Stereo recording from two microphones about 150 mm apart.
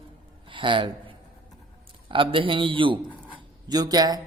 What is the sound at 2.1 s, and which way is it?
Speech, 35° right (ahead or behind).